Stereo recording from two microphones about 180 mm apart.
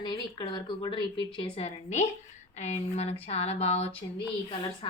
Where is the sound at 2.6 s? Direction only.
35° left (ahead or behind).